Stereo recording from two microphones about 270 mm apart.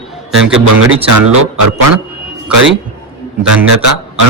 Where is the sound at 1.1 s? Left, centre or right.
Right.